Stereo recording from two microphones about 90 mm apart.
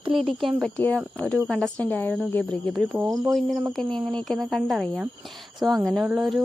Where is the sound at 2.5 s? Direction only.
Centre (ahead or behind).